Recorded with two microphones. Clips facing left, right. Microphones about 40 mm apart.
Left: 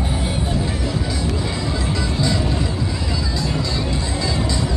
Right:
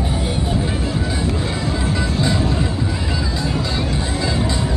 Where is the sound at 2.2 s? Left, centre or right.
Right.